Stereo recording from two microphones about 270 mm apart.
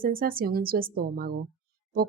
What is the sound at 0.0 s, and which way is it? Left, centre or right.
Speech, right.